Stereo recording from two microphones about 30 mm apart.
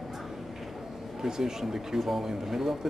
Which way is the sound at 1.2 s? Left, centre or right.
Centre.